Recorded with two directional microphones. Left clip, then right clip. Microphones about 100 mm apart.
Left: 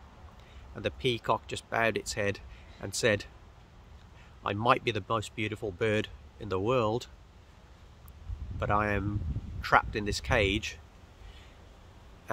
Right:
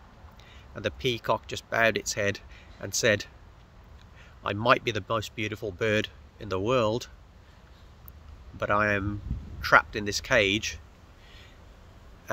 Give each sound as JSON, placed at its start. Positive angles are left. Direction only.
{"t": 0.7, "sound": "speech", "side_deg": 20}
{"t": 4.4, "sound": "speech", "side_deg": 15}
{"t": 8.5, "sound": "speech", "side_deg": 20}